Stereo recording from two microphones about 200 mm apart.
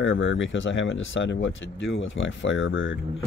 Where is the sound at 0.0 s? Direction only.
75° left (ahead or behind).